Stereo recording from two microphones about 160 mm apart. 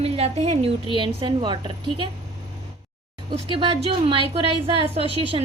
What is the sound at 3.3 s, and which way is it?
A woman's voice, 35° right (ahead or behind).